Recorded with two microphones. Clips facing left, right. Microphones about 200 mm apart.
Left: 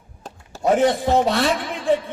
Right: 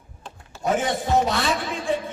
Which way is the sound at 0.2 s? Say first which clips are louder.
Left 5 dB; 40° left (ahead or behind).